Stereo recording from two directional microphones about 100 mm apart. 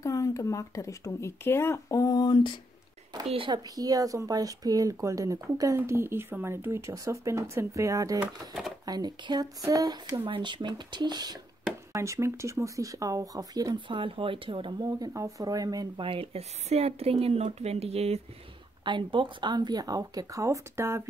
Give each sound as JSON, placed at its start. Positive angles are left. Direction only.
{"t": 0.0, "sound": "speech", "side_deg": 35}
{"t": 3.3, "sound": "speech", "side_deg": -60}
{"t": 3.5, "sound": "speech", "side_deg": -40}
{"t": 10.2, "sound": "speech", "side_deg": -55}
{"t": 11.9, "sound": "speech", "side_deg": -30}
{"t": 13.7, "sound": "speech", "side_deg": -55}
{"t": 16.0, "sound": "speech", "side_deg": -70}
{"t": 18.9, "sound": "speech", "side_deg": -55}